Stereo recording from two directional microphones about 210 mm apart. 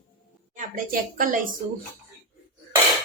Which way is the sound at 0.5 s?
40° right (ahead or behind).